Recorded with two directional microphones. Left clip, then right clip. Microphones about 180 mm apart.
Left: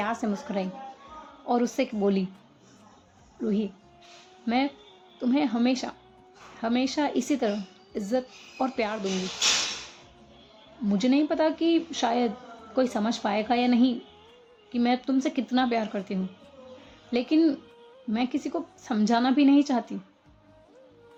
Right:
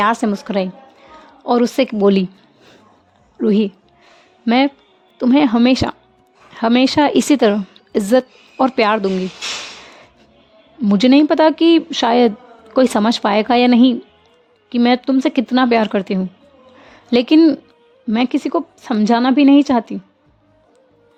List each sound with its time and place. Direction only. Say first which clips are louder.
0.0 s a woman's voice: right 14 dB; 80° right
3.4 s a woman's voice: right 14 dB; 75° right (ahead or behind)
10.8 s a woman's voice: right 13 dB; 70° right (ahead or behind)